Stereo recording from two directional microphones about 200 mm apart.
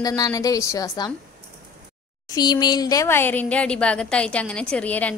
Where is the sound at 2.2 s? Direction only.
20° left (ahead or behind).